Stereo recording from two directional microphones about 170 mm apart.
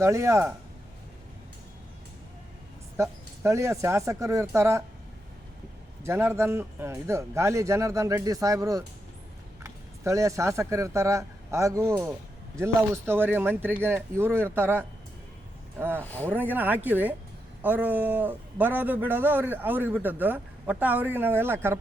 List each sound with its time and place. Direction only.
0.0 s a man's voice: 15° right (ahead or behind)
3.0 s a man's voice: 15° right (ahead or behind)
6.0 s a man's voice: 15° right (ahead or behind)
16.0 s speech: 10° left (ahead or behind)
16.3 s a man's voice: 10° right (ahead or behind)